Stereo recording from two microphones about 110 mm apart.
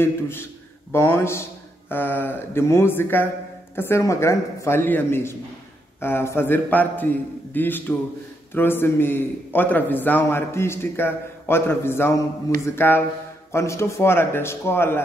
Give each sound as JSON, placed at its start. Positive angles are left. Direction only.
{"t": 0.0, "sound": "a man's voice", "side_deg": 20}